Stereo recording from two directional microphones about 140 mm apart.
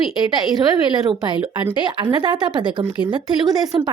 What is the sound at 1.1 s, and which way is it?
Speech, 35° right (ahead or behind).